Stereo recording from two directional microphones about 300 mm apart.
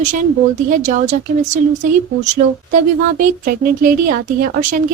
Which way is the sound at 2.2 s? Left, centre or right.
Right.